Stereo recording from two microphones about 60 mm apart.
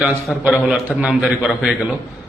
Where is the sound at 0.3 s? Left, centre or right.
Centre.